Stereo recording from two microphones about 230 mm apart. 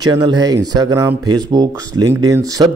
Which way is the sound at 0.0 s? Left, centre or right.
Centre.